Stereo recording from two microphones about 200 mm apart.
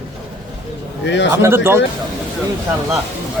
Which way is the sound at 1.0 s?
60° left (ahead or behind).